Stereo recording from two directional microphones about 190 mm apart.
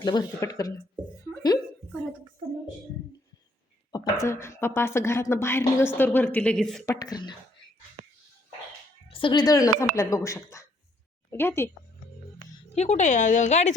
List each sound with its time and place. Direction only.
0.0 s speech: 20° left (ahead or behind)
3.9 s a woman's voice: 20° left (ahead or behind); by 6.8 s centre (ahead or behind)
6.8 s speech: 20° left (ahead or behind)
9.0 s a woman's voice: 25° left (ahead or behind)
12.4 s music: 45° right (ahead or behind)
12.7 s a woman's voice: 35° left (ahead or behind)